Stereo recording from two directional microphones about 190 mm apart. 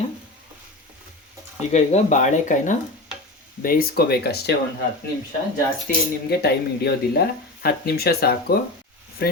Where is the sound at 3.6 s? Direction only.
50° left (ahead or behind).